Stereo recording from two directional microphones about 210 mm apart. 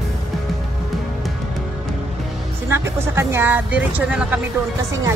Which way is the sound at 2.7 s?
10° right (ahead or behind).